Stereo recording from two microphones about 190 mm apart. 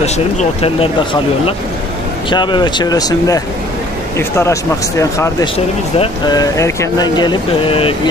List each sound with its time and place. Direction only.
0.0 s speech: 35° left (ahead or behind)
2.3 s speech: 25° left (ahead or behind)